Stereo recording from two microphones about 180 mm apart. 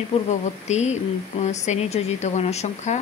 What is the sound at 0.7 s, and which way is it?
Speech, 40° left (ahead or behind).